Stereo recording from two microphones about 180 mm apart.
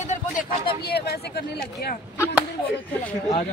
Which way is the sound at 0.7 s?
60° left (ahead or behind).